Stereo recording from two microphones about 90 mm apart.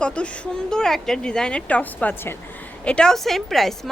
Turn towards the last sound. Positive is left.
turn(degrees=0)  # may be behind; listen again after turning